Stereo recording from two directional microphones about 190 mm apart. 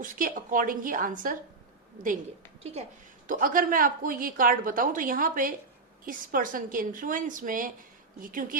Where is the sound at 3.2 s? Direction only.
45° right (ahead or behind).